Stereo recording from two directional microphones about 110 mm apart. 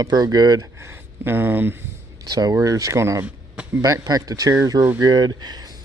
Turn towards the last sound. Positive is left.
turn(degrees=-40)  # may be behind; listen again after turning